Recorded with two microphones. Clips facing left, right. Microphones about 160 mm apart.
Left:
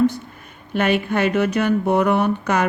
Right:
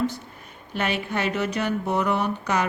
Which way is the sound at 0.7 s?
55° left (ahead or behind).